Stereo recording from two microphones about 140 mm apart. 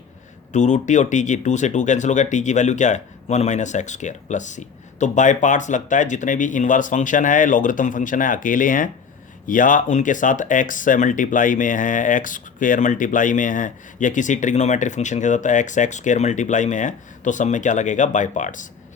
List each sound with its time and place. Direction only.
0.5 s speech: 55° left (ahead or behind)